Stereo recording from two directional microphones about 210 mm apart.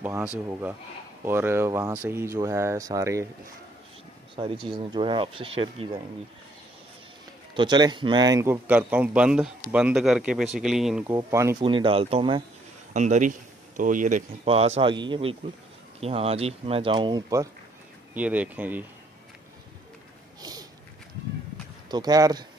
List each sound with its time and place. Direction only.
0.0 s speech: 10° right (ahead or behind)
4.4 s speech: 25° right (ahead or behind)
7.5 s speech: 20° right (ahead or behind); by 11.1 s 5° right (ahead or behind)
11.1 s speech: 15° right (ahead or behind)
12.9 s speech: 35° right (ahead or behind); by 17.5 s 15° right (ahead or behind)
18.1 s speech: 5° right (ahead or behind)
21.9 s speech: 20° right (ahead or behind)